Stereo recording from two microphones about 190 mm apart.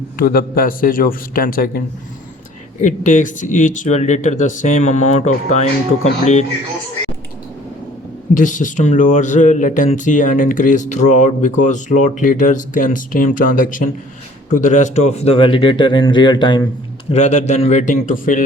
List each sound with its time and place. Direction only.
0.2 s a man's voice: 50° left (ahead or behind)
2.8 s speech: 40° left (ahead or behind)
8.3 s speech: 45° left (ahead or behind); by 16.6 s 25° left (ahead or behind)
17.1 s speech: 35° left (ahead or behind)